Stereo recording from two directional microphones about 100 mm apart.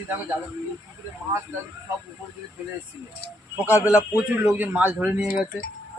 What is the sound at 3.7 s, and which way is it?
Speech, 15° right (ahead or behind).